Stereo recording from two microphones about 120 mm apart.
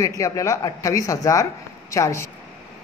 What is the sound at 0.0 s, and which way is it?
Speech, 25° left (ahead or behind).